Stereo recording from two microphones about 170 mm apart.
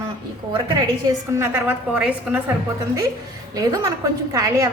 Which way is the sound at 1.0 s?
20° right (ahead or behind).